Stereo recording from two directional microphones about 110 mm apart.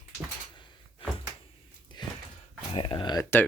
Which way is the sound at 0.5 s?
50° left (ahead or behind).